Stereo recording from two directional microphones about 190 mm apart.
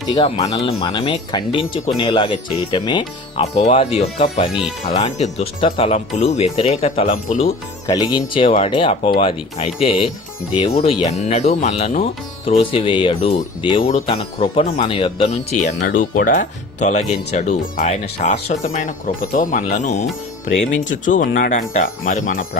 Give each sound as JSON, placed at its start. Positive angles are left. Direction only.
{"t": 0.1, "sound": "speech", "side_deg": 25}